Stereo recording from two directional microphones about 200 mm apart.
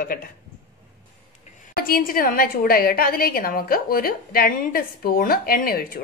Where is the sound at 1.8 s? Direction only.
45° left (ahead or behind).